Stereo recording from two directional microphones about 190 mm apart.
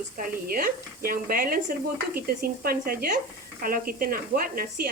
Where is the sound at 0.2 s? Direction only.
50° right (ahead or behind).